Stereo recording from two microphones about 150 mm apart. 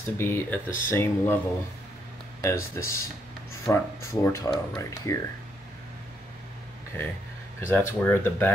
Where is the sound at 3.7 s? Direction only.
20° left (ahead or behind).